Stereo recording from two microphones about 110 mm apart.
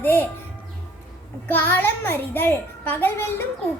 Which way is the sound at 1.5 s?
20° left (ahead or behind).